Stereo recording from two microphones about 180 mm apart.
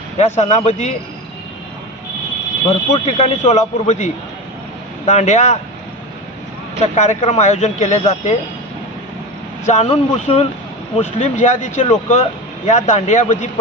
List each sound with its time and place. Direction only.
0.2 s speech: 40° left (ahead or behind)
2.6 s speech: 35° left (ahead or behind)
6.9 s speech: 40° left (ahead or behind)
9.6 s speech: 35° left (ahead or behind)